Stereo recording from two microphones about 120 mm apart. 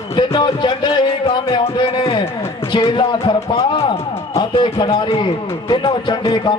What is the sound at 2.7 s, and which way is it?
Speech, 45° left (ahead or behind).